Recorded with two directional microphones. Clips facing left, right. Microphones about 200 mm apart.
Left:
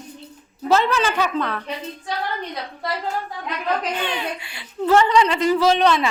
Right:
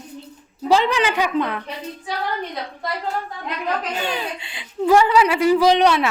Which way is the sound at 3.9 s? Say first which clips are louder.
Right 1 dB; 40° right (ahead or behind).